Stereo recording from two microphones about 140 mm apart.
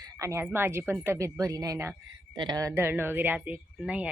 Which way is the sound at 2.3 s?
30° right (ahead or behind).